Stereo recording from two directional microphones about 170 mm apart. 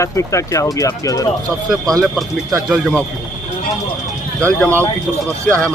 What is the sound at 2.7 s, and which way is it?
Speech, centre (ahead or behind).